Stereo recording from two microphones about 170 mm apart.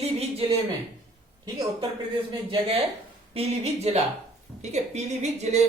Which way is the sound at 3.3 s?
35° right (ahead or behind).